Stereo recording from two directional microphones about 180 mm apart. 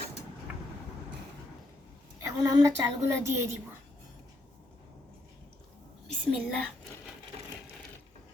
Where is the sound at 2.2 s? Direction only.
20° right (ahead or behind).